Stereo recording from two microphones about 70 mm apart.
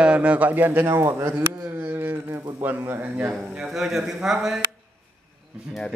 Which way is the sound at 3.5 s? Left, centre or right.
Centre.